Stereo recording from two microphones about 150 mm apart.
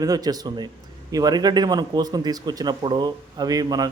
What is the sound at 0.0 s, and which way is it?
A man's voice, 25° right (ahead or behind).